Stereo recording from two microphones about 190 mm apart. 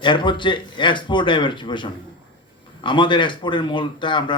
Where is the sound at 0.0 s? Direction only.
25° left (ahead or behind).